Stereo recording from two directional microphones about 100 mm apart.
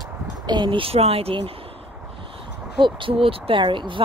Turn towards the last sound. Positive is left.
turn(degrees=-55)  # may be behind; listen again after turning